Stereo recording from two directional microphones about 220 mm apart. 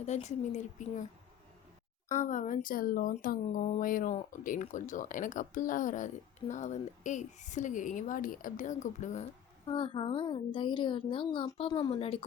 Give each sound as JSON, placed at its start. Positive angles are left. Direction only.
{"t": 0.0, "sound": "speech", "side_deg": 30}
{"t": 2.1, "sound": "speech", "side_deg": 35}
{"t": 9.6, "sound": "speech", "side_deg": 20}